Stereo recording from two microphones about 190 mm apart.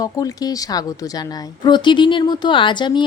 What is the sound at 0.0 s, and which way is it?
A woman's voice, 20° left (ahead or behind).